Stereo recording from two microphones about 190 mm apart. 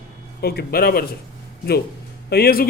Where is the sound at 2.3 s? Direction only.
50° left (ahead or behind).